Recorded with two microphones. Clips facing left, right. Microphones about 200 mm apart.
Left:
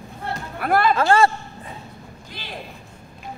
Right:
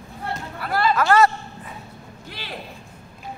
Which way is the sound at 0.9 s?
30° left (ahead or behind).